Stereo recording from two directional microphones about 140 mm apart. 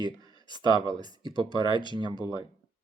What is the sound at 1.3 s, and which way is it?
Speech, 35° left (ahead or behind).